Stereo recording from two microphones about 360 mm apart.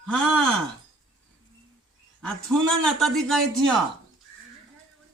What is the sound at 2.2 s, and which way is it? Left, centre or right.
Speech, centre.